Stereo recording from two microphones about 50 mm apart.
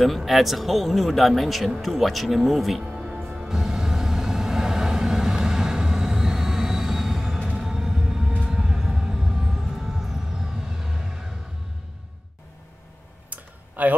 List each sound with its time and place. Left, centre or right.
0.0 s a man's voice: centre
2.9 s music: centre
8.4 s vehicle: centre
13.3 s clicking: right